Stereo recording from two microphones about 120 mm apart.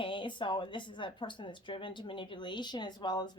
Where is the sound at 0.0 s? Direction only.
45° left (ahead or behind).